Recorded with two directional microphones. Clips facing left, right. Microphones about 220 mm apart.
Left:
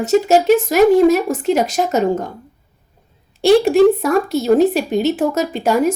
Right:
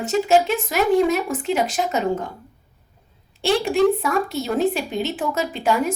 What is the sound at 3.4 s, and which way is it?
A woman's voice, 45° left (ahead or behind).